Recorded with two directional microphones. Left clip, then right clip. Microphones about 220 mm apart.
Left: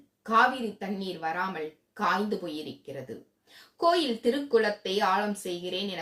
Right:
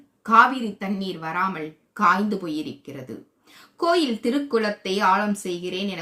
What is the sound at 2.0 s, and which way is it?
Speech, 25° right (ahead or behind).